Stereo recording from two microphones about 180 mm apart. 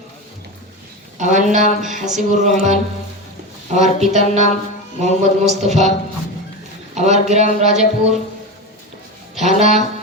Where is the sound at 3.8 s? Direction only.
40° right (ahead or behind).